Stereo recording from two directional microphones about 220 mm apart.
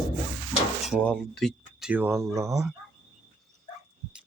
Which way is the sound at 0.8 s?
Centre (ahead or behind).